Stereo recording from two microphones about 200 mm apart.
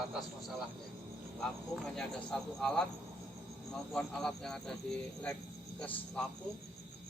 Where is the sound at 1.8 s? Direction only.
5° left (ahead or behind).